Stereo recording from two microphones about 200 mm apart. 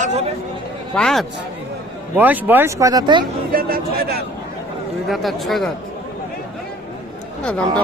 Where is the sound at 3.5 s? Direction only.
45° right (ahead or behind).